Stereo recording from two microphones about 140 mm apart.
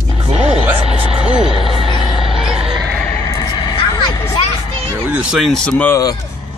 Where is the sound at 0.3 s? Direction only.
45° right (ahead or behind).